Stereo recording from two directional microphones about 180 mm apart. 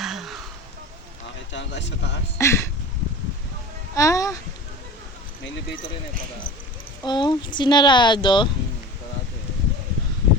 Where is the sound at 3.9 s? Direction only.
20° left (ahead or behind).